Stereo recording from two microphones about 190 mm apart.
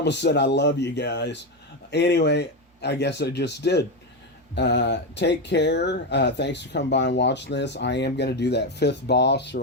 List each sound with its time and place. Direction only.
0.0 s speech: 65° left (ahead or behind)